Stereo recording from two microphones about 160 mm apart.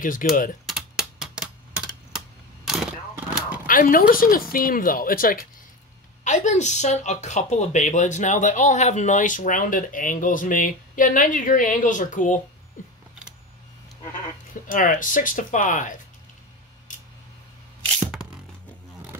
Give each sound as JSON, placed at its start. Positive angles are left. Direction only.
{"t": 0.0, "sound": "a woman's voice", "side_deg": 55}
{"t": 0.7, "sound": "typing", "side_deg": -5}
{"t": 2.6, "sound": "a sound", "side_deg": -5}
{"t": 3.6, "sound": "a woman's voice", "side_deg": 60}
{"t": 6.2, "sound": "speech", "side_deg": 50}
{"t": 12.8, "sound": "a sound", "side_deg": 55}
{"t": 14.7, "sound": "a woman's voice", "side_deg": 55}
{"t": 16.9, "sound": "scissors", "side_deg": 55}